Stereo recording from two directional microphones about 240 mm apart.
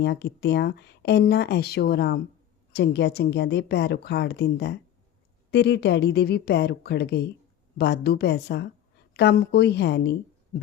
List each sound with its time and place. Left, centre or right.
0.0 s speech: left